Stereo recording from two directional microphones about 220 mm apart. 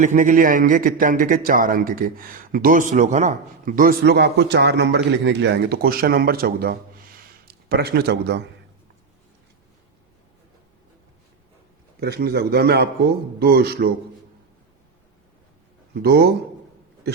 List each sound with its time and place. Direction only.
0.0 s a man's voice: 35° right (ahead or behind)
11.9 s a man's voice: 45° right (ahead or behind)
16.0 s a man's voice: 45° right (ahead or behind)